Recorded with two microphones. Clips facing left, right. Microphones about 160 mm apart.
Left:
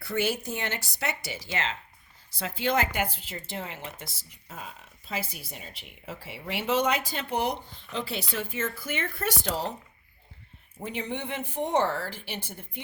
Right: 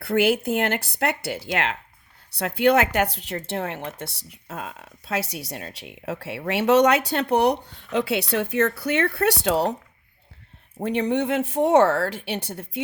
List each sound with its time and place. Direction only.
0.0 s speech: 60° right (ahead or behind)
10.8 s speech: 70° right (ahead or behind)